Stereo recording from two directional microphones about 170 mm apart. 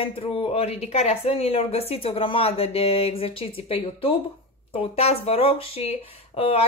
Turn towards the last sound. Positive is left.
turn(degrees=35)  # may be behind; listen again after turning